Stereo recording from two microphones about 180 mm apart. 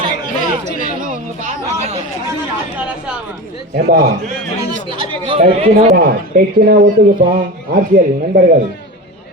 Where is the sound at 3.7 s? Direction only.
55° right (ahead or behind).